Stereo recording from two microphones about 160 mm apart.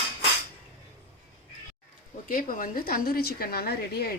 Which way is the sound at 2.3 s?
60° left (ahead or behind).